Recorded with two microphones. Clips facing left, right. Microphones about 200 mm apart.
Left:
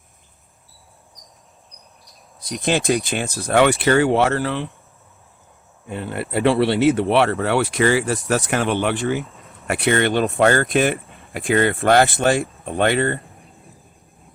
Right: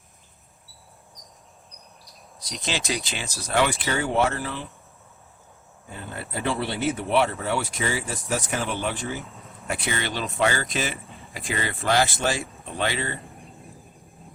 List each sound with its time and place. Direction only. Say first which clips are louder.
2.4 s speech: left 10 dB; 55° left (ahead or behind)
5.9 s speech: left 10 dB; 70° left (ahead or behind); by 13.1 s 55° left (ahead or behind)